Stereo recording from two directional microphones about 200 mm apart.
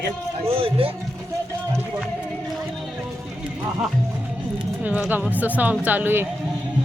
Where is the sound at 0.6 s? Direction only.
25° right (ahead or behind).